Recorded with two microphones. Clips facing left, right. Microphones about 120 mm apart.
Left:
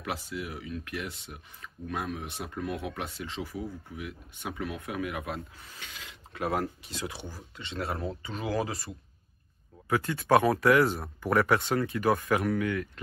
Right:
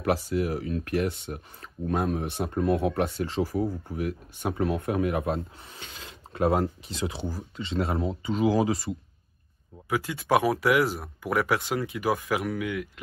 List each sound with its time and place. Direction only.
0.3 s speech: 45° right (ahead or behind); by 8.9 s 25° right (ahead or behind)
9.8 s speech: 5° right (ahead or behind)